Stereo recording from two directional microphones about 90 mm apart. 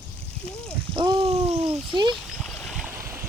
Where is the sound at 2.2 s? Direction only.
Centre (ahead or behind).